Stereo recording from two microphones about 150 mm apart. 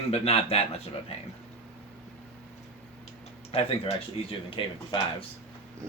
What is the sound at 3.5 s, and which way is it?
Speech, 40° left (ahead or behind).